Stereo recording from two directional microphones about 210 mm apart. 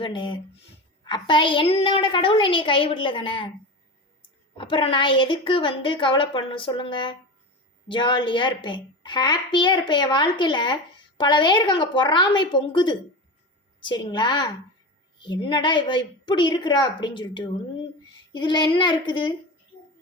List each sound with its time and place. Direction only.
0.0 s a child's voice: 25° left (ahead or behind)
4.5 s a child's voice: 25° left (ahead or behind)